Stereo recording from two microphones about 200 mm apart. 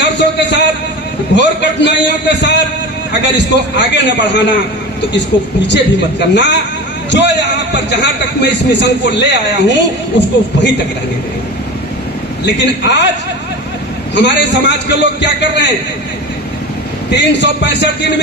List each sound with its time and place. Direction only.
0.0 s a sound: 60° left (ahead or behind)
1.4 s a man's voice: 60° left (ahead or behind)
5.3 s a woman's voice: 20° left (ahead or behind)
5.6 s a man's voice: 60° left (ahead or behind)
12.5 s a man's voice: 60° left (ahead or behind)
14.2 s a man's voice: 60° left (ahead or behind)
17.1 s a man's voice: 60° left (ahead or behind)